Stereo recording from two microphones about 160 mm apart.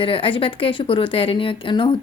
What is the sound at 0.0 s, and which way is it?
A woman's voice, 35° left (ahead or behind).